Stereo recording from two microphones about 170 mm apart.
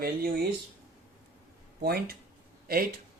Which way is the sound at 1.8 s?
70° right (ahead or behind).